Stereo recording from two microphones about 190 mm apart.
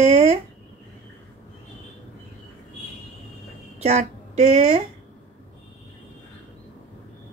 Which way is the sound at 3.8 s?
35° right (ahead or behind).